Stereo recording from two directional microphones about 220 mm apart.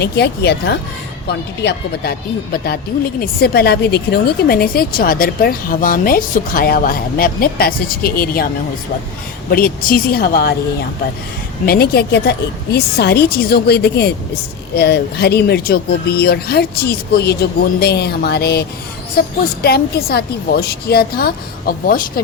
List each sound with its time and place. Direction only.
0.0 s speech: 50° left (ahead or behind)
9.5 s a woman's voice: 40° left (ahead or behind)
11.6 s speech: 45° left (ahead or behind)